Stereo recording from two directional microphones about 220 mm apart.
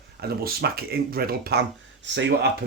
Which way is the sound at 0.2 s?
45° right (ahead or behind).